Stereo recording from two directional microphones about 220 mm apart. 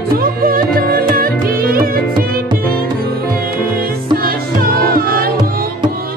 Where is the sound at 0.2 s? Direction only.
40° right (ahead or behind).